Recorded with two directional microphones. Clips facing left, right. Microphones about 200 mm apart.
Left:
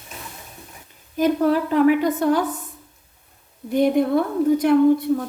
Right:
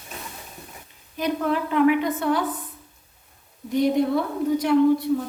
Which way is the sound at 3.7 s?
55° left (ahead or behind).